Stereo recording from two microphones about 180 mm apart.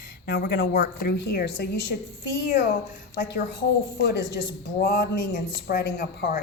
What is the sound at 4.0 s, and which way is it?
A woman's voice, 65° left (ahead or behind).